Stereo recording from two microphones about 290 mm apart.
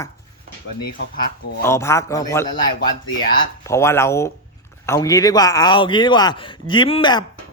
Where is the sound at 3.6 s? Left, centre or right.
Centre.